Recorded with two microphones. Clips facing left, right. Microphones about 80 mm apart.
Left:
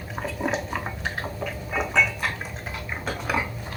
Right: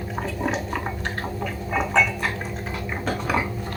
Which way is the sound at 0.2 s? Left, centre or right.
Centre.